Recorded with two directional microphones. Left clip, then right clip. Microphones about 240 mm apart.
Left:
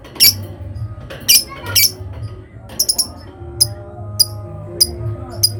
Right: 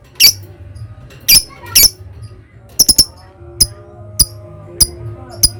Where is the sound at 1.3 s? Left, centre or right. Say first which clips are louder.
Right 3 dB; right.